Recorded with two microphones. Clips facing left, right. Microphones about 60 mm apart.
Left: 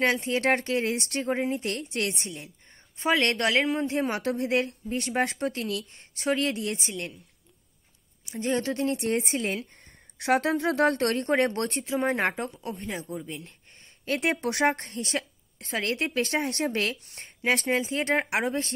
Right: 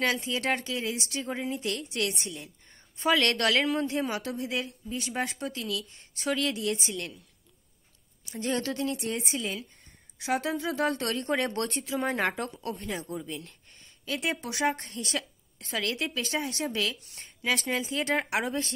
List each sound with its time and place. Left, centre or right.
0.0 s a woman's voice: left
3.3 s a woman's voice: left
3.8 s a woman's voice: left
8.3 s a woman's voice: left
8.9 s a woman's voice: left
10.1 s a woman's voice: left
13.0 s speech: centre
14.0 s a woman's voice: left